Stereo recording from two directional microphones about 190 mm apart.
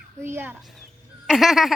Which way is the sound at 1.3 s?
Centre (ahead or behind).